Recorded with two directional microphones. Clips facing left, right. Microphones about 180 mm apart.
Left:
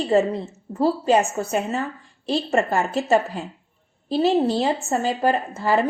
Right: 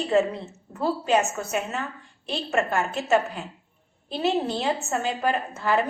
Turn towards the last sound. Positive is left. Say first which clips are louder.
# left 3 dB
turn(degrees=35)  # may be behind; listen again after turning